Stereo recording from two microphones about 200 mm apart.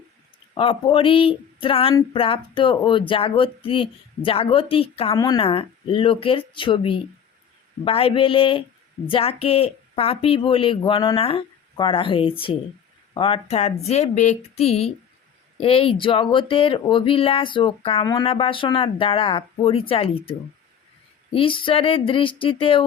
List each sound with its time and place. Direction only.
0.5 s speech: 25° left (ahead or behind)
21.3 s speech: 25° left (ahead or behind)